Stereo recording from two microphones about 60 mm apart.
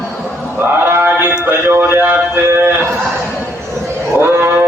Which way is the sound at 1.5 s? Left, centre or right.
Right.